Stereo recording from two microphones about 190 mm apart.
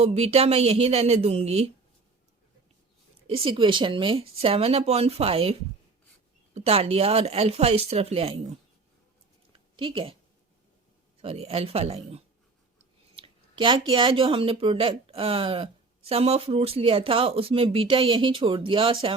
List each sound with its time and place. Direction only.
0.0 s speech: 35° right (ahead or behind)
3.2 s speech: 30° right (ahead or behind)
9.7 s speech: 30° right (ahead or behind)
11.2 s a woman's voice: 30° right (ahead or behind)